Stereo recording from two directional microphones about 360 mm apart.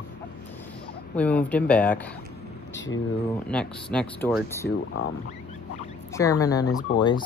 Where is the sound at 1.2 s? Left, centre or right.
Centre.